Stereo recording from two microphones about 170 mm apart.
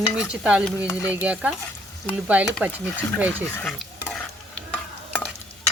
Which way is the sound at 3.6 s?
Centre (ahead or behind).